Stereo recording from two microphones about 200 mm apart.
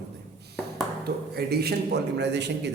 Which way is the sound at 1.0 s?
50° right (ahead or behind).